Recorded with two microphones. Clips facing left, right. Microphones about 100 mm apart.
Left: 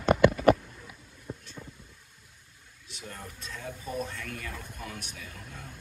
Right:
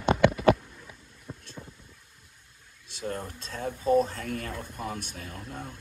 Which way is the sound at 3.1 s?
35° right (ahead or behind).